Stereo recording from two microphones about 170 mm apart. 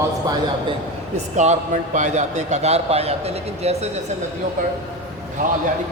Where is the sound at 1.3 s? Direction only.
45° right (ahead or behind).